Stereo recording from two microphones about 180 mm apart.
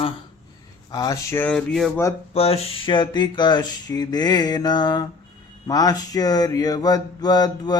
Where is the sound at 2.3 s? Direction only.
35° left (ahead or behind).